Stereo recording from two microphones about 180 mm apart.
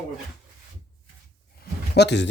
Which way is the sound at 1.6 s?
70° left (ahead or behind).